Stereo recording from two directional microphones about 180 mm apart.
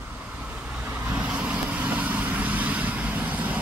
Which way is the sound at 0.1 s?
10° right (ahead or behind).